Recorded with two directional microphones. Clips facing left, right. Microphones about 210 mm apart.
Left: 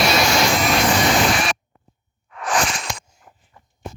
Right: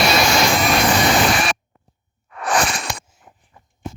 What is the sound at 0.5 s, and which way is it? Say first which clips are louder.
Vacuum cleaner: right 1 dB; 60° right (ahead or behind).